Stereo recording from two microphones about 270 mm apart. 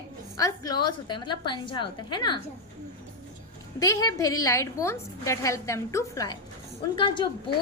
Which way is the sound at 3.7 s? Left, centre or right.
Centre.